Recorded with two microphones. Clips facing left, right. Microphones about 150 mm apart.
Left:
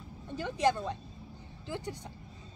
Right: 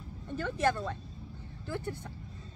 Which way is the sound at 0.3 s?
15° left (ahead or behind).